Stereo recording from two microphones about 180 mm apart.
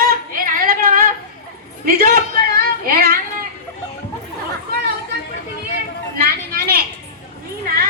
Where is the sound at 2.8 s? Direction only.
55° right (ahead or behind).